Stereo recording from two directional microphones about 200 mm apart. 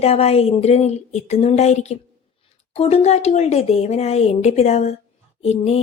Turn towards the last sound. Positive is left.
turn(degrees=30)  # may be behind; listen again after turning